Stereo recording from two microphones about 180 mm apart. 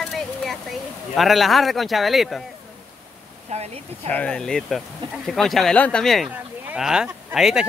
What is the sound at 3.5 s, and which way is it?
Speech, 35° right (ahead or behind).